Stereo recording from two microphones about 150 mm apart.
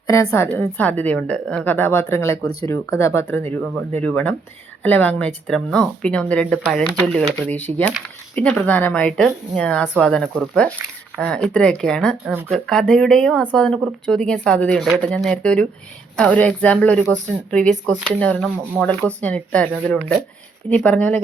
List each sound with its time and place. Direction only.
0.3 s speech: 10° left (ahead or behind)